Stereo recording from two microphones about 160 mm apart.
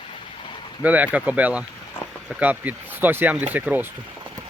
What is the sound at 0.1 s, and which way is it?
Vehicle, 30° left (ahead or behind).